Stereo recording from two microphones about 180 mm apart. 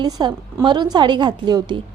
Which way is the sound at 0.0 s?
25° right (ahead or behind).